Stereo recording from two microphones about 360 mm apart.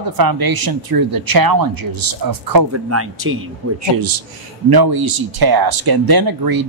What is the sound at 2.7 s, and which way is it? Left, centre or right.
Speech, right.